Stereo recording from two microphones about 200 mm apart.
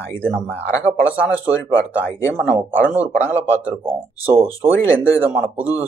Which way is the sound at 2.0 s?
10° left (ahead or behind).